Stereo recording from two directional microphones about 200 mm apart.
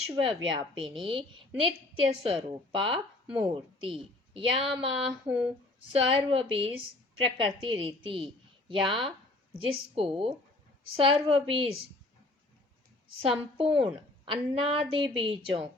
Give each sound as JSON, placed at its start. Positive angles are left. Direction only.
{"t": 0.2, "sound": "a woman's voice", "side_deg": -25}
{"t": 5.3, "sound": "speech", "side_deg": -5}
{"t": 6.1, "sound": "a woman's voice", "side_deg": -25}
{"t": 13.6, "sound": "a woman's voice", "side_deg": -25}